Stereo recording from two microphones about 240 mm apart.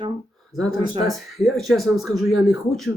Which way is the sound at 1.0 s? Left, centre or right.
Centre.